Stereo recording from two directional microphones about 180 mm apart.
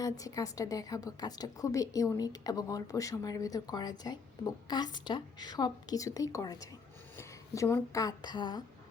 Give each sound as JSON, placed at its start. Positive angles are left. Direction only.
{"t": 0.0, "sound": "a woman's voice", "side_deg": 20}